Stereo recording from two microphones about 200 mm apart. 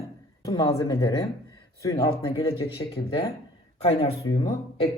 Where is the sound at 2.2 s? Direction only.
25° left (ahead or behind).